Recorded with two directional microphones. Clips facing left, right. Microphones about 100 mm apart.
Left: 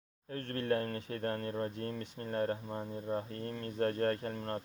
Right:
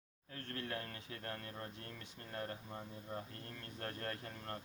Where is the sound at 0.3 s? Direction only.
45° left (ahead or behind).